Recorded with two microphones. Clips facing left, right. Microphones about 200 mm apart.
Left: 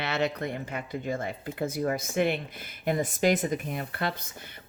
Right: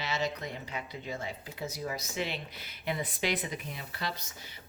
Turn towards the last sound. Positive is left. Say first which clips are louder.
# left 5 dB
turn(degrees=55)  # may be behind; listen again after turning